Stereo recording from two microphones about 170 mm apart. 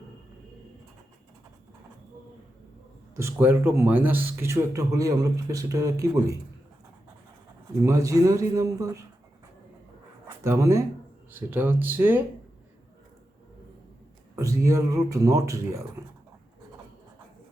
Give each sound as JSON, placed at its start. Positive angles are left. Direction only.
{"t": 3.2, "sound": "speech", "side_deg": -15}
{"t": 7.9, "sound": "speech", "side_deg": -20}
{"t": 10.4, "sound": "speech", "side_deg": -15}
{"t": 14.3, "sound": "speech", "side_deg": -15}